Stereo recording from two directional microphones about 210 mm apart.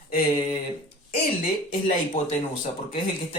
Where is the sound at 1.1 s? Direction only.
40° left (ahead or behind).